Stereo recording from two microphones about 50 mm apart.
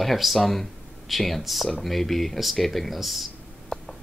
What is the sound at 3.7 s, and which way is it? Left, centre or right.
Tick, centre.